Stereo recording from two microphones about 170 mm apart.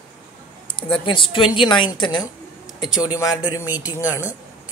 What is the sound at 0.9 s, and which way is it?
A woman's voice, 30° left (ahead or behind).